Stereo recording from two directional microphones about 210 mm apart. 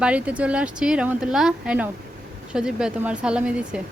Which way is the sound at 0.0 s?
5° right (ahead or behind).